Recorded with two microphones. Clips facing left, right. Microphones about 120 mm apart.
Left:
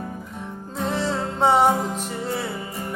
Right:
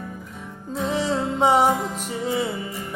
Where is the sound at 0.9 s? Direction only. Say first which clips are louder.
Right 2 dB; 15° right (ahead or behind).